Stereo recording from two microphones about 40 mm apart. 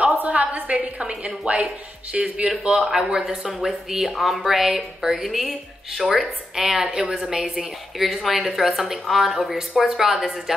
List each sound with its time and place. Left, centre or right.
0.2 s a woman's voice: right
1.0 s a woman's voice: right
2.7 s a woman's voice: centre
8.0 s speech: centre